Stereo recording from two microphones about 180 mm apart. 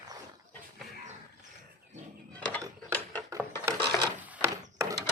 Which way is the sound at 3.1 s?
20° right (ahead or behind).